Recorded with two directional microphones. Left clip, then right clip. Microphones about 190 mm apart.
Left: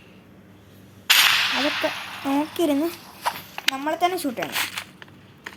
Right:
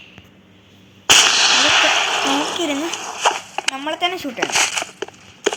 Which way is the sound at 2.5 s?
15° left (ahead or behind).